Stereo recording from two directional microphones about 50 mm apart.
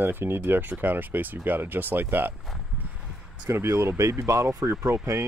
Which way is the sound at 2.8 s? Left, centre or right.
Right.